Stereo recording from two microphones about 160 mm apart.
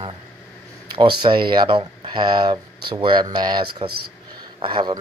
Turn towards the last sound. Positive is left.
turn(degrees=-30)  # may be behind; listen again after turning